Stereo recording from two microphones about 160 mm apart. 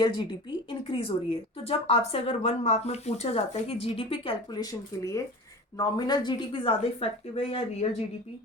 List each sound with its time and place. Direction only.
0.7 s a woman's voice: 35° left (ahead or behind)
4.6 s a woman's voice: 20° left (ahead or behind); by 7.9 s 40° left (ahead or behind)